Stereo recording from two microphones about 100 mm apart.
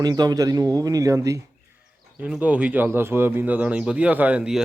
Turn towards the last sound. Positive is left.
turn(degrees=-10)  # may be behind; listen again after turning